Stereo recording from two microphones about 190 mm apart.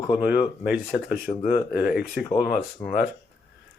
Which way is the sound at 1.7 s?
5° right (ahead or behind).